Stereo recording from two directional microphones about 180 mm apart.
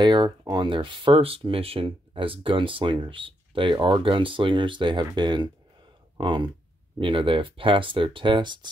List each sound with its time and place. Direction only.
0.0 s speech: 25° right (ahead or behind)